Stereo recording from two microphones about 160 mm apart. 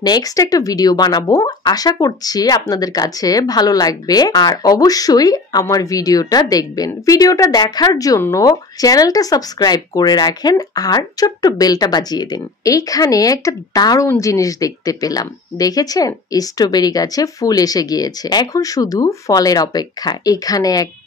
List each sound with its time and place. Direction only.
0.0 s speech: 25° left (ahead or behind)